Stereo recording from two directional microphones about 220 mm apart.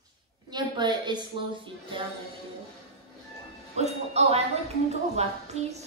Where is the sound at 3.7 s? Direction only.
30° right (ahead or behind).